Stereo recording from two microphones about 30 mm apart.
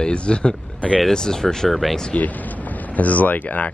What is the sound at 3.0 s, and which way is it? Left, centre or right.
Speech, left.